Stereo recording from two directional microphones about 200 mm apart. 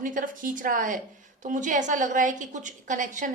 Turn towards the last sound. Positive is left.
turn(degrees=-40)  # may be behind; listen again after turning